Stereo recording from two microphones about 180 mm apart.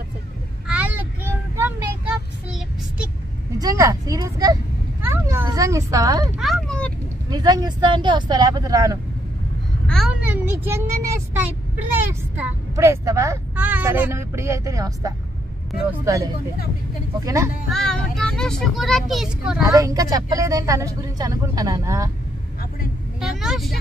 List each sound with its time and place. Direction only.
0.7 s child singing: 10° right (ahead or behind)
3.5 s speech: 20° right (ahead or behind)
5.0 s a sound: 15° right (ahead or behind)
6.3 s a sound: centre (ahead or behind)
7.2 s speech: 20° right (ahead or behind)
9.8 s a sound: centre (ahead or behind)
10.2 s speech: 10° right (ahead or behind)
17.2 s speech: 15° right (ahead or behind)
17.6 s speech: 5° left (ahead or behind)
19.7 s speech: 20° right (ahead or behind)
23.2 s vehicle: 5° right (ahead or behind)